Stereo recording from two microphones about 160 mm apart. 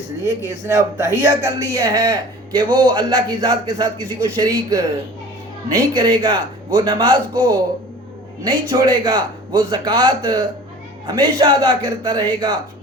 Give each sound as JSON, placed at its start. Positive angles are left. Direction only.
{"t": 0.3, "sound": "a man's voice", "side_deg": -20}
{"t": 8.7, "sound": "a man's voice", "side_deg": -25}